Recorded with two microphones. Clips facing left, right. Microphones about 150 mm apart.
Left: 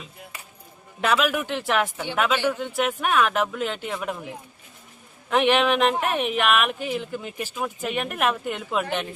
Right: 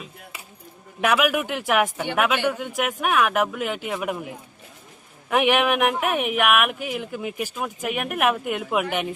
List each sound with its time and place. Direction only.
1.0 s speech: 10° right (ahead or behind)
5.3 s speech: 10° right (ahead or behind)